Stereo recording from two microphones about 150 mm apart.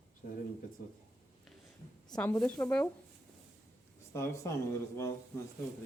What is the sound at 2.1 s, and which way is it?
Speech, 5° left (ahead or behind).